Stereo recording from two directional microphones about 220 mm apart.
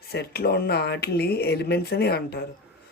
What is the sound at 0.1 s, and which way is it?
Speech, 45° left (ahead or behind).